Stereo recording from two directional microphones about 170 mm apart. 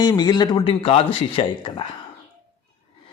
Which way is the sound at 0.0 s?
25° left (ahead or behind).